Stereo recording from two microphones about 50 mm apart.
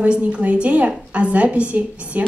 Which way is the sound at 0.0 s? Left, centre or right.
Right.